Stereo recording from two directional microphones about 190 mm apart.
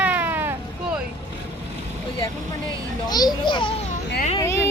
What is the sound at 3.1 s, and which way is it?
Speech, 20° left (ahead or behind).